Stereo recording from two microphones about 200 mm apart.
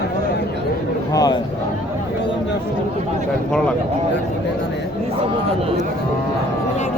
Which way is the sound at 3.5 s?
5° left (ahead or behind).